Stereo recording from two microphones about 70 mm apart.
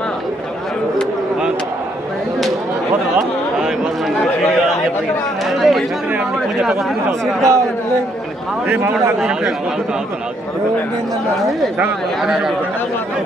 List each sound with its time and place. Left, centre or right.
5.5 s chatter: centre
6.1 s a sound: centre
7.1 s speech: right
8.6 s a man's voice: right
9.2 s a man's voice: centre
12.2 s speech: centre